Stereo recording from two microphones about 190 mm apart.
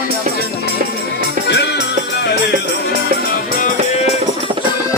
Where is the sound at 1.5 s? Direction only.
65° left (ahead or behind).